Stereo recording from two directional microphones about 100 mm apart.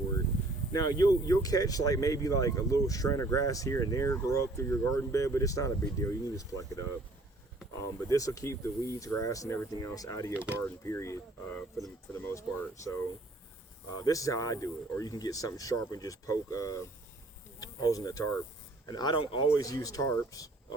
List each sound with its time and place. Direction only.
0.7 s speech: 40° left (ahead or behind)
8.1 s speech: 35° left (ahead or behind)
10.3 s speech: 15° right (ahead or behind)
10.6 s speech: 25° left (ahead or behind)
12.1 s a sound: 25° left (ahead or behind)
12.5 s speech: 30° left (ahead or behind); by 19.5 s 50° left (ahead or behind)
19.5 s speech: 35° left (ahead or behind)